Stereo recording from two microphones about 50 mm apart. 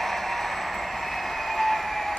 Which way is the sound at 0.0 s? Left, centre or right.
Centre.